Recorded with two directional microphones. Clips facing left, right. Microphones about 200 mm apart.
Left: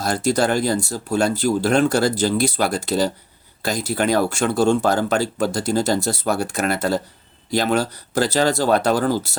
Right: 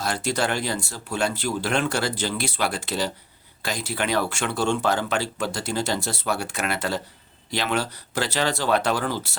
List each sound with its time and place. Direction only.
0.0 s speech: 40° left (ahead or behind)